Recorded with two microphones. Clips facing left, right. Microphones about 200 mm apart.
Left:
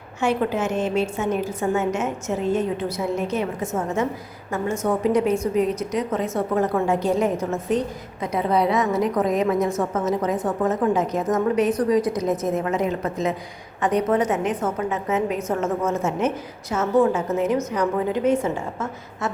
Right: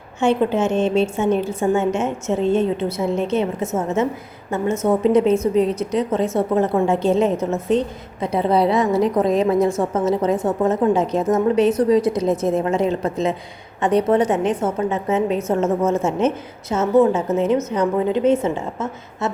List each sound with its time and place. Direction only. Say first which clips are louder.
0.2 s a woman's voice: right 4 dB; 25° right (ahead or behind)
5.0 s a woman's voice: right 5 dB; 25° right (ahead or behind)